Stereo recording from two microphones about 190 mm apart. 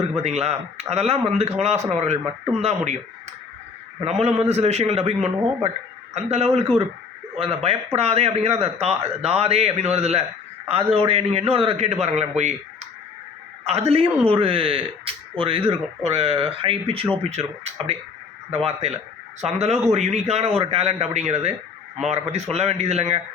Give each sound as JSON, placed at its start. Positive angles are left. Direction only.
{"t": 0.2, "sound": "a man's voice", "side_deg": -35}
{"t": 4.0, "sound": "a man's voice", "side_deg": -35}